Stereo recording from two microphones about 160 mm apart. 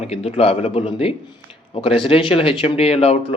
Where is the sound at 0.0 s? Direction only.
40° left (ahead or behind).